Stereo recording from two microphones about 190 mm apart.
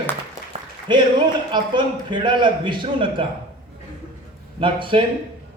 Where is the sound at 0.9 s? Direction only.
25° right (ahead or behind).